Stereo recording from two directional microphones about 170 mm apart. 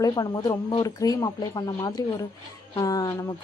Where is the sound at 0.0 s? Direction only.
25° left (ahead or behind).